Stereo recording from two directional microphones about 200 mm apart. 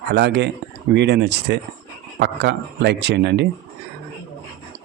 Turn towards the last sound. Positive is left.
turn(degrees=-60)  # may be behind; listen again after turning